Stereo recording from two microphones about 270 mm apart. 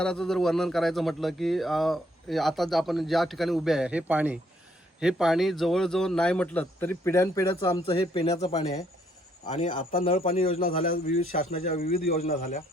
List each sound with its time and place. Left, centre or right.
0.0 s speech: centre
9.5 s a man's voice: left